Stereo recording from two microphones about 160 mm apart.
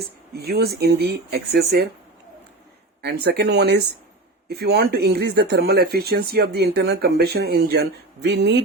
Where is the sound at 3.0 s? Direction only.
90° right.